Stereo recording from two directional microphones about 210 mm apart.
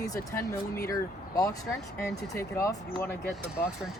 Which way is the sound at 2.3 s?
15° left (ahead or behind).